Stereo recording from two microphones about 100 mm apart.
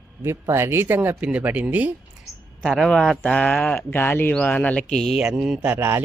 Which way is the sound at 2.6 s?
Centre (ahead or behind).